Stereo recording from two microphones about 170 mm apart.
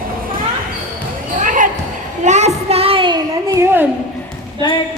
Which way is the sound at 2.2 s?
45° right (ahead or behind).